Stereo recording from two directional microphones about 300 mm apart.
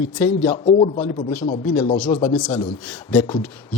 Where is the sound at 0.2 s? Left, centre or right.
Centre.